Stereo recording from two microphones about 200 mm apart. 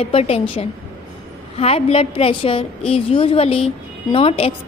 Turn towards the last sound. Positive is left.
turn(degrees=30)  # may be behind; listen again after turning